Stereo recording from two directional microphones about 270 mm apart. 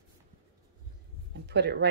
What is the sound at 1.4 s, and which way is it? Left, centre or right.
Speech, right.